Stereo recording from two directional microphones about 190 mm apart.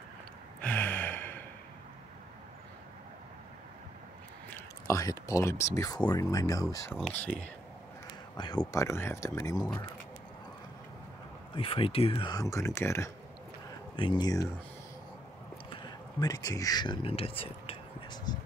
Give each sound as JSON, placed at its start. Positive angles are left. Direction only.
{"t": 0.6, "sound": "gasp", "side_deg": 10}
{"t": 4.5, "sound": "speech", "side_deg": 10}
{"t": 7.0, "sound": "speech", "side_deg": 5}
{"t": 8.4, "sound": "speech", "side_deg": 20}
{"t": 11.5, "sound": "speech", "side_deg": 30}
{"t": 13.9, "sound": "speech", "side_deg": 25}
{"t": 15.7, "sound": "speech", "side_deg": 20}